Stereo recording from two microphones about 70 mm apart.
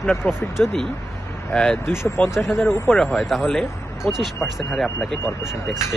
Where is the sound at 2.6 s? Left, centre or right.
Left.